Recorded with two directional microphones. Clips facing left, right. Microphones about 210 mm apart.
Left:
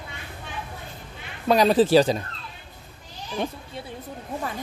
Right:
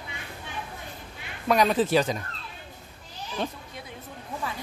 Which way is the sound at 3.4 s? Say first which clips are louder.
Left 3 dB; 10° left (ahead or behind).